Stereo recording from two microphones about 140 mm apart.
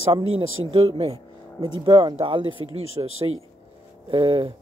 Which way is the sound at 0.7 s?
40° right (ahead or behind).